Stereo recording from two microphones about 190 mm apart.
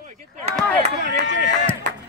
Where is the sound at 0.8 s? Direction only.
40° right (ahead or behind).